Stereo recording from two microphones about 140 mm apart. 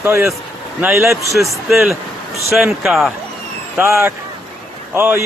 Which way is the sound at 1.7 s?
Centre (ahead or behind).